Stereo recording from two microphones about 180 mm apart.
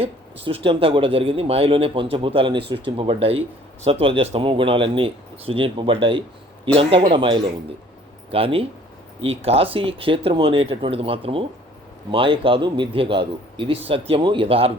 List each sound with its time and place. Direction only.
0.4 s a man's voice: 30° right (ahead or behind)